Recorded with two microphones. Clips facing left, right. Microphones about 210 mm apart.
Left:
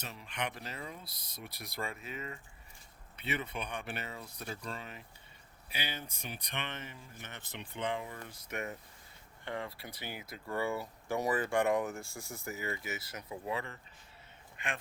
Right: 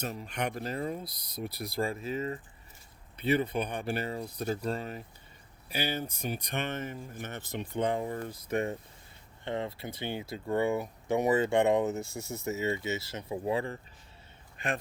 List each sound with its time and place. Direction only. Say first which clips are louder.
0.0 s speech: right 6 dB; 40° right (ahead or behind)
8.4 s a man's voice: right 9 dB; 30° right (ahead or behind)